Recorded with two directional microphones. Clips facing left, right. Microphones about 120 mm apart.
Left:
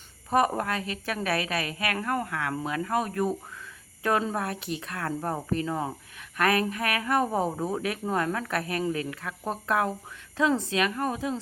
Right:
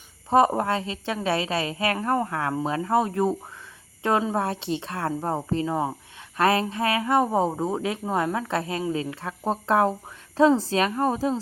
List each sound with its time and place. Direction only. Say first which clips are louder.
0.3 s a woman's voice: right 5 dB; 25° right (ahead or behind)